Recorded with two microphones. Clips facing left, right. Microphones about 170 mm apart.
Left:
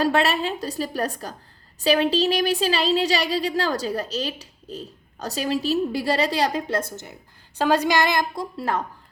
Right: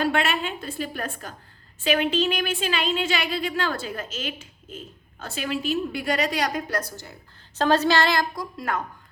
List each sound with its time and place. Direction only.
0.0 s speech: 35° left (ahead or behind); by 7.2 s 20° left (ahead or behind)
7.6 s female singing: 10° left (ahead or behind)
8.5 s speech: 30° left (ahead or behind)